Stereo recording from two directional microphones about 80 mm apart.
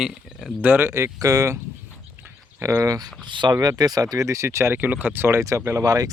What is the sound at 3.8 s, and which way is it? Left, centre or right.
Speech, right.